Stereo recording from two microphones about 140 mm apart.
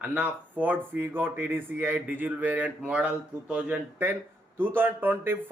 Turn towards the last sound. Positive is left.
turn(degrees=-15)  # may be behind; listen again after turning